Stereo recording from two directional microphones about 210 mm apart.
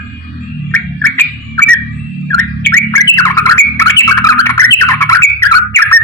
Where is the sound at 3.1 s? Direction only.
10° left (ahead or behind).